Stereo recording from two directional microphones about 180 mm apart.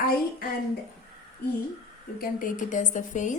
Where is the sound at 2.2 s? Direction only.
50° left (ahead or behind).